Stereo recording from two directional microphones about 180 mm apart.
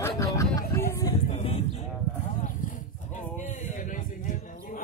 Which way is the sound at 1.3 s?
35° left (ahead or behind).